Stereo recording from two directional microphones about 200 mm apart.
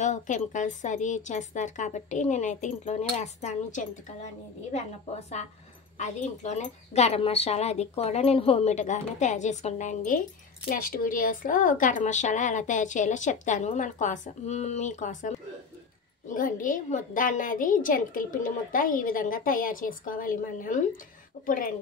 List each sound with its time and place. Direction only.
0.0 s speech: 35° left (ahead or behind)
5.9 s a woman's voice: 35° left (ahead or behind)